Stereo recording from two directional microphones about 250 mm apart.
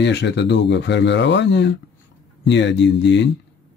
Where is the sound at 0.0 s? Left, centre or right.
Left.